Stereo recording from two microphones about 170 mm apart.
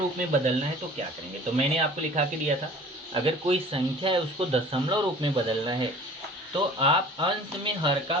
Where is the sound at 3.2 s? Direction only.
35° right (ahead or behind).